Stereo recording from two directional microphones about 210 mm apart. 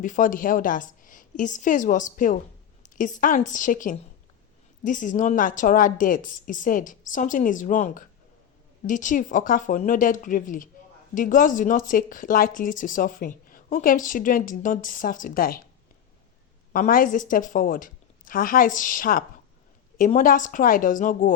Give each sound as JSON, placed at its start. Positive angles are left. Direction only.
{"t": 0.0, "sound": "a woman's voice", "side_deg": 40}
{"t": 16.7, "sound": "a woman's voice", "side_deg": 40}